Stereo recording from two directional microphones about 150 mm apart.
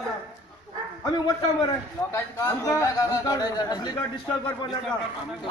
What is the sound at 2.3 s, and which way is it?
A man's voice, 20° left (ahead or behind).